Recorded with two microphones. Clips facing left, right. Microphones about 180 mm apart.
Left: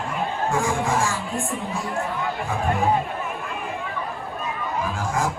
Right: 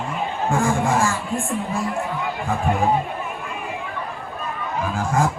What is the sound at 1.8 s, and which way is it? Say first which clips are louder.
Speech: right 1 dB; centre (ahead or behind).